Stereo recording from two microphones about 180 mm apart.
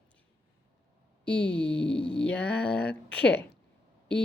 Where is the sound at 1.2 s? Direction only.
70° left (ahead or behind).